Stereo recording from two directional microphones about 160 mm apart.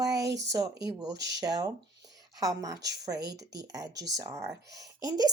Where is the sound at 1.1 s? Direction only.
90° right.